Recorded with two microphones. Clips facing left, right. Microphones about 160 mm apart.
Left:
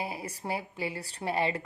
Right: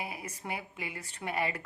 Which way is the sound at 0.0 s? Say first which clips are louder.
Left 4 dB; 30° left (ahead or behind).